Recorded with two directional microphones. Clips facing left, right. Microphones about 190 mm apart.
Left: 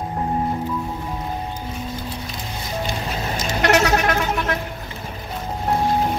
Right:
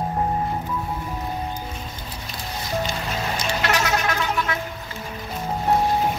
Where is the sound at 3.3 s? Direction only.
45° left (ahead or behind).